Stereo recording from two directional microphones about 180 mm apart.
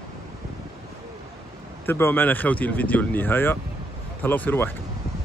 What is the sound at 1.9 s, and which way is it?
Speech, 10° left (ahead or behind).